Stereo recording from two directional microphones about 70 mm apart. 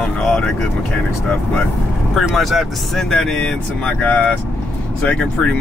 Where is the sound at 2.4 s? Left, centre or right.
Centre.